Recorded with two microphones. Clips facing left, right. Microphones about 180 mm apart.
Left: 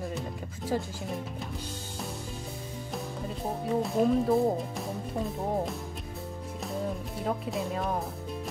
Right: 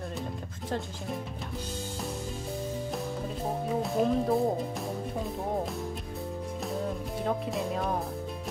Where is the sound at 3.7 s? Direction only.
Centre (ahead or behind).